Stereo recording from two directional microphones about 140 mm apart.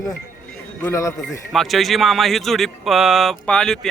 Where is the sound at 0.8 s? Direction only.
20° left (ahead or behind).